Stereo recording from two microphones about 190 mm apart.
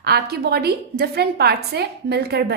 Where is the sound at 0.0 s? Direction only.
55° right (ahead or behind).